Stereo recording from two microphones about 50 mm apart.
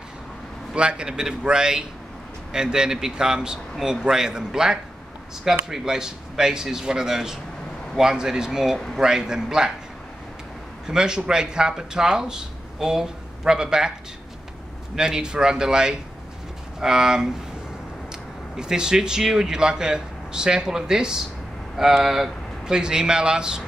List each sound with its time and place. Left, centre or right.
0.7 s speech: centre
10.9 s speech: centre
15.0 s speech: centre
18.6 s speech: centre
22.7 s speech: centre